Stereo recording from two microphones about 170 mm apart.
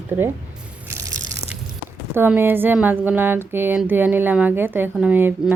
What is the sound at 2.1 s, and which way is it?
A woman's voice, 10° right (ahead or behind).